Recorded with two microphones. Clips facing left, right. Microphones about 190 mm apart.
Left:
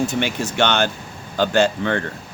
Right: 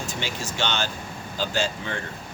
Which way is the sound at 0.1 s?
60° left (ahead or behind).